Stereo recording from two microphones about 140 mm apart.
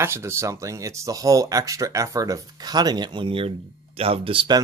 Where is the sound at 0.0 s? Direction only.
20° right (ahead or behind).